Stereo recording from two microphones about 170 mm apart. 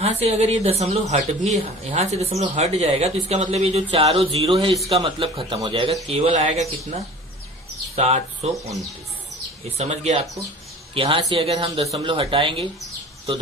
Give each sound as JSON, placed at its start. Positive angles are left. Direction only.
{"t": 0.0, "sound": "speech", "side_deg": -40}
{"t": 9.7, "sound": "speech", "side_deg": -40}